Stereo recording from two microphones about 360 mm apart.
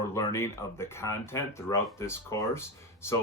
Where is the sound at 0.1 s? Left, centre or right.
Centre.